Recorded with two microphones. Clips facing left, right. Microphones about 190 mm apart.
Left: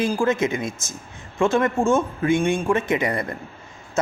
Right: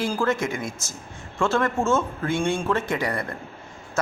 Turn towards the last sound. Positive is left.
turn(degrees=20)  # may be behind; listen again after turning